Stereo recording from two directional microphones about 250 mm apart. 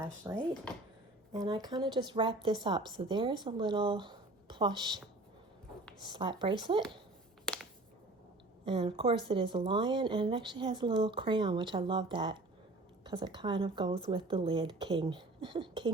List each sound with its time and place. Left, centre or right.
0.2 s a woman's voice: centre
6.1 s a woman's voice: centre
7.4 s a sound: centre
8.6 s a woman's voice: centre